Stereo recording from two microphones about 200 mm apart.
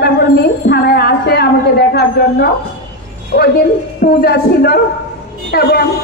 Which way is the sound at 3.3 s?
50° left (ahead or behind).